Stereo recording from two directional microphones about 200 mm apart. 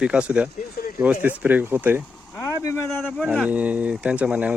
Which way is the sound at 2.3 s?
15° left (ahead or behind).